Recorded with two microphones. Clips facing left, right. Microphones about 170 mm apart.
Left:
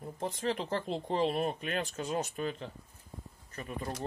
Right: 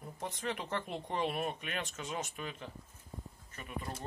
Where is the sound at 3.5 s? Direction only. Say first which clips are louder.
Left 8 dB; 40° left (ahead or behind).